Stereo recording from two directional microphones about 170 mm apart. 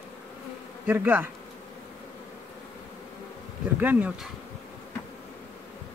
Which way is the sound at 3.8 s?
10° right (ahead or behind).